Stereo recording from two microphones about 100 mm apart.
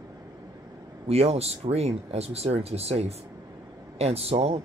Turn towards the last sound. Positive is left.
turn(degrees=-90)